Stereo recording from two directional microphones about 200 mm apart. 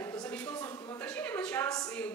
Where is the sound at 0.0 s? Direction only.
20° left (ahead or behind).